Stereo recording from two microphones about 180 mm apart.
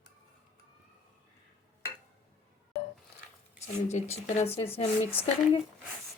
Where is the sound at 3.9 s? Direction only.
40° left (ahead or behind).